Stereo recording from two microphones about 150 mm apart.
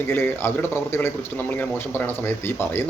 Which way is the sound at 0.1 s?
15° left (ahead or behind).